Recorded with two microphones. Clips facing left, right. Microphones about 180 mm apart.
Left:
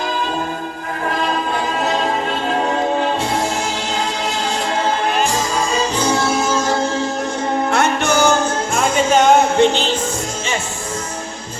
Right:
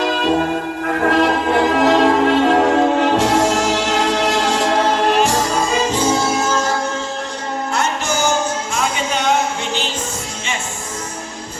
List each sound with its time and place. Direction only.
0.0 s music: 80° right
6.1 s music: 5° right (ahead or behind)
7.7 s music: 60° left (ahead or behind)